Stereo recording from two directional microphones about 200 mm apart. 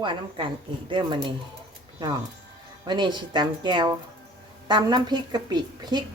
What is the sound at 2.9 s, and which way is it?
Speech, 20° right (ahead or behind).